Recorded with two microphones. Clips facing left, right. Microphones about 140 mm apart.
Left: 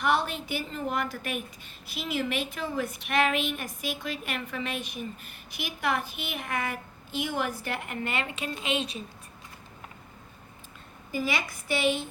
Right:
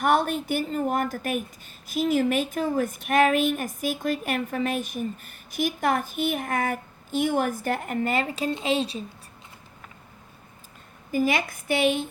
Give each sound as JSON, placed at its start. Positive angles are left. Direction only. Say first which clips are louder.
{"t": 0.0, "sound": "a woman's voice", "louder": "right 5 dB", "side_deg": -50}
{"t": 11.1, "sound": "a woman's voice", "louder": "right 6 dB", "side_deg": -50}